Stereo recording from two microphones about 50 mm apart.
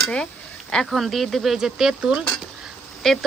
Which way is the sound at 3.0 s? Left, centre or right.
Centre.